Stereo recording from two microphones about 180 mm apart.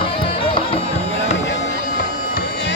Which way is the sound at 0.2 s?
30° left (ahead or behind).